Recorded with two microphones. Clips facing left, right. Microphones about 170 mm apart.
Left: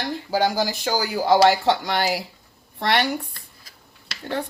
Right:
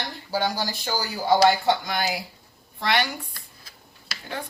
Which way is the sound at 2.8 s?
65° left (ahead or behind).